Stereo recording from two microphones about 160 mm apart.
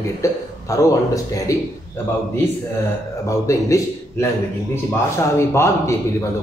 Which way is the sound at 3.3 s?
20° left (ahead or behind).